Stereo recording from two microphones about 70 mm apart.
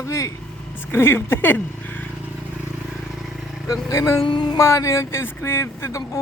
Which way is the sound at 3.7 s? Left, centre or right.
Left.